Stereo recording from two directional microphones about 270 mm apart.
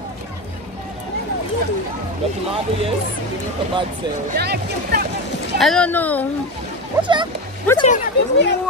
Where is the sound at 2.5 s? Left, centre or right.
Right.